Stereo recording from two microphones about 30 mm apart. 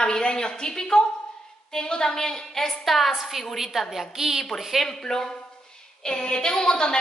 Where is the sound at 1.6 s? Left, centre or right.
Left.